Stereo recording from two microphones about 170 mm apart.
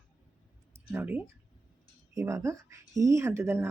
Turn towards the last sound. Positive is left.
turn(degrees=-15)  # may be behind; listen again after turning